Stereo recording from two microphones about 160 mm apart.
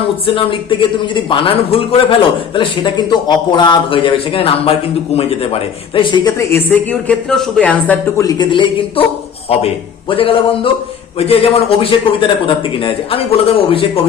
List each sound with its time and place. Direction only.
0.3 s speech: 30° left (ahead or behind)
6.5 s speech: 10° left (ahead or behind)
8.2 s speech: 25° left (ahead or behind)
10.1 s speech: 35° left (ahead or behind)